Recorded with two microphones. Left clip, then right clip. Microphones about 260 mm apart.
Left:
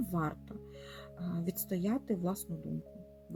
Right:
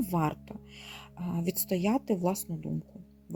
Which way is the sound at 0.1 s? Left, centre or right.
Right.